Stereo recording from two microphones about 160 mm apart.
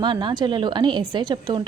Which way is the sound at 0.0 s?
30° right (ahead or behind).